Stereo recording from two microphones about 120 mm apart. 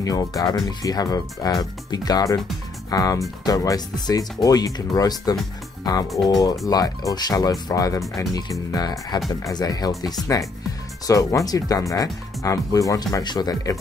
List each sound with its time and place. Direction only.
0.0 s speech: 30° left (ahead or behind)